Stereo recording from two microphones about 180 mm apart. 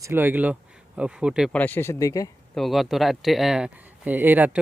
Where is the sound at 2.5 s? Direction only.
Centre (ahead or behind).